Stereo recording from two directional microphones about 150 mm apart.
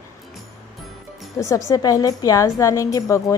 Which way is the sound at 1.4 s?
20° left (ahead or behind).